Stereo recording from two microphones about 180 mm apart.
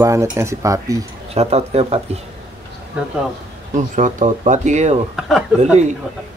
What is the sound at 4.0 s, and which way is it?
Speech, 45° right (ahead or behind).